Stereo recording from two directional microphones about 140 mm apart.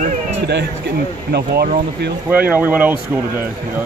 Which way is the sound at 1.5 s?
90° right.